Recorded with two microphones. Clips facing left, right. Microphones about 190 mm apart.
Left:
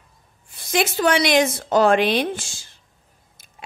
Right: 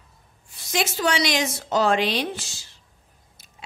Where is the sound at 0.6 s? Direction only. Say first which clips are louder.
Left 5 dB; 55° left (ahead or behind).